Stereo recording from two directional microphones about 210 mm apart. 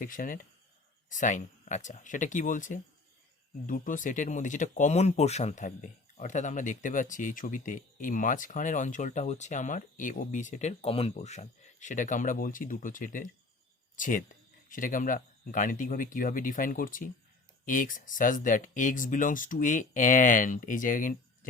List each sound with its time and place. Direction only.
0.0 s speech: 40° left (ahead or behind)